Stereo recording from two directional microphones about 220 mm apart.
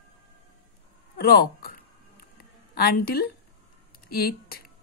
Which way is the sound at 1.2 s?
45° left (ahead or behind).